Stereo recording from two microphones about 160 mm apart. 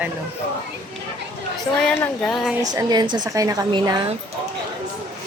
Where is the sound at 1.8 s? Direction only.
10° left (ahead or behind).